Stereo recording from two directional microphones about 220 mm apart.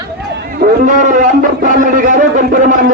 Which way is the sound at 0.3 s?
40° right (ahead or behind).